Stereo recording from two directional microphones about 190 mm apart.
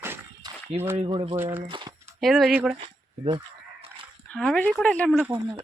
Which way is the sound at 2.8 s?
25° right (ahead or behind).